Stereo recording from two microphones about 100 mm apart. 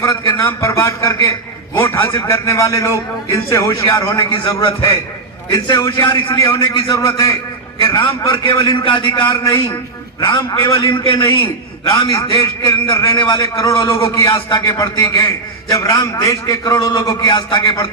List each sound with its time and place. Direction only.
0.3 s a man's voice: 25° left (ahead or behind)
5.5 s a man's voice: 45° left (ahead or behind)
14.8 s a man's voice: 35° left (ahead or behind)
16.8 s a man's voice: 50° left (ahead or behind)
17.1 s a man's voice: 40° left (ahead or behind)